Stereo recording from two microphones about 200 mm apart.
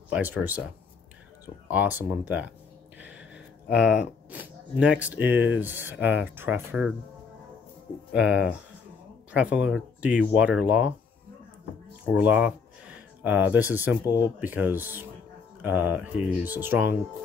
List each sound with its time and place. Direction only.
0.1 s speech: 10° right (ahead or behind)
3.6 s speech: centre (ahead or behind)
8.1 s speech: 5° right (ahead or behind)
12.1 s speech: 5° right (ahead or behind)